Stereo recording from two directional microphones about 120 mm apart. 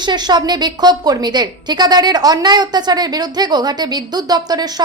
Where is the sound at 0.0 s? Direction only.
35° right (ahead or behind).